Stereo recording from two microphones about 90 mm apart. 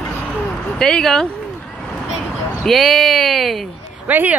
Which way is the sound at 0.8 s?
5° left (ahead or behind).